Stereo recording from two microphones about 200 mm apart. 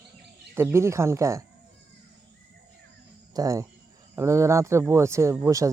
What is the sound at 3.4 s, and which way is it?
Speech, 15° right (ahead or behind).